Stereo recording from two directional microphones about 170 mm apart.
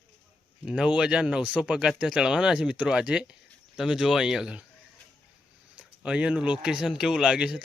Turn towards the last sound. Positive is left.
turn(degrees=-5)  # may be behind; listen again after turning